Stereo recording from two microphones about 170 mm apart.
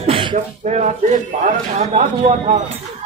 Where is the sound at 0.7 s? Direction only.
45° right (ahead or behind).